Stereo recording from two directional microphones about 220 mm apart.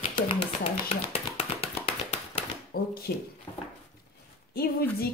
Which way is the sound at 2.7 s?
45° left (ahead or behind).